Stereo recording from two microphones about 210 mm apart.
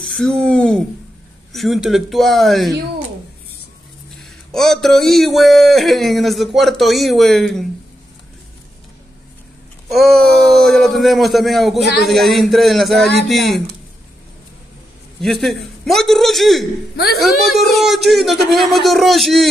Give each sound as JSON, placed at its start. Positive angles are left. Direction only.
{"t": 0.0, "sound": "speech", "side_deg": 5}
{"t": 4.2, "sound": "speech", "side_deg": 0}
{"t": 9.8, "sound": "a sound", "side_deg": 0}
{"t": 10.4, "sound": "speech", "side_deg": 0}
{"t": 15.1, "sound": "speech", "side_deg": 0}
{"t": 16.9, "sound": "a woman's voice", "side_deg": 50}
{"t": 17.2, "sound": "speech", "side_deg": 0}